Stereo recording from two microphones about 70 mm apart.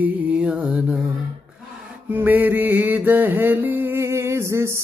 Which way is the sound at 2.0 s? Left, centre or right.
Right.